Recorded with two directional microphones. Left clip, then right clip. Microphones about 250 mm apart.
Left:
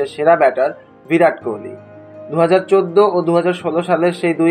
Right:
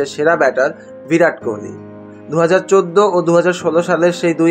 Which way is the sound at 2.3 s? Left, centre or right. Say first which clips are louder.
Right 1 dB; right.